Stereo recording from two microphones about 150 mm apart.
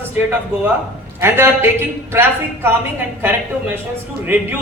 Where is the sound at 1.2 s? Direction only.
15° right (ahead or behind).